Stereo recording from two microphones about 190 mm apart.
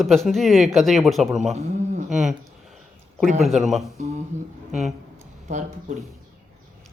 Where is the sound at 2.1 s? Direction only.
Centre (ahead or behind).